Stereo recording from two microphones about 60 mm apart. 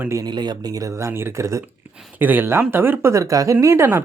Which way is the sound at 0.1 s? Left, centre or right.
Right.